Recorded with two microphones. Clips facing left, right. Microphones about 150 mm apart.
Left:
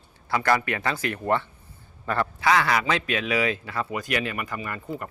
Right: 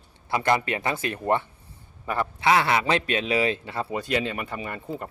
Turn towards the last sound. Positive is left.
turn(degrees=-25)  # may be behind; listen again after turning